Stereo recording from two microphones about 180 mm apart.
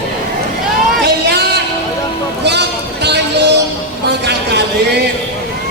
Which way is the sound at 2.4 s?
70° right (ahead or behind).